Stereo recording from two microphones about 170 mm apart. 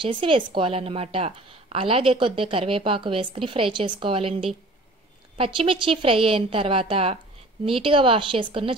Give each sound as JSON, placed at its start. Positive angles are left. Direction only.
{"t": 0.0, "sound": "a woman's voice", "side_deg": -30}